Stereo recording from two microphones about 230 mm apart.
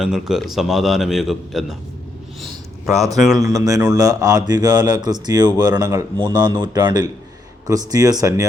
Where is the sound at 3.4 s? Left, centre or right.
Centre.